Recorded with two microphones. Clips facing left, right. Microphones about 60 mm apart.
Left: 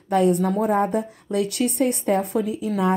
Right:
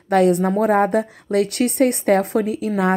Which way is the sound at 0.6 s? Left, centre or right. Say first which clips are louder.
Right 4 dB; right.